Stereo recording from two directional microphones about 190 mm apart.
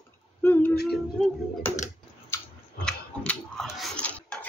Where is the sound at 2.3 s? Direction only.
15° left (ahead or behind).